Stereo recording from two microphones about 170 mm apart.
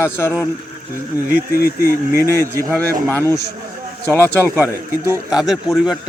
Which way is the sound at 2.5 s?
15° right (ahead or behind).